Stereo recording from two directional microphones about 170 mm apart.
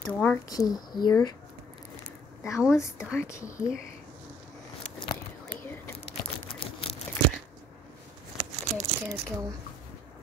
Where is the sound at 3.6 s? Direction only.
45° left (ahead or behind).